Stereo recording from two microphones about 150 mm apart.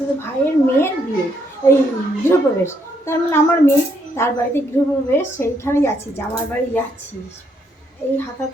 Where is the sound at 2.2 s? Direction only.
15° left (ahead or behind).